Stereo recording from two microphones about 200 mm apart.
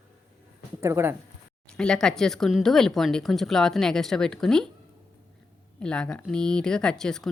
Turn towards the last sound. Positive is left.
turn(degrees=5)  # may be behind; listen again after turning